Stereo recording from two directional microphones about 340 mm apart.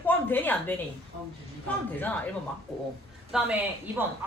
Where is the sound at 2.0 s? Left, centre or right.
Centre.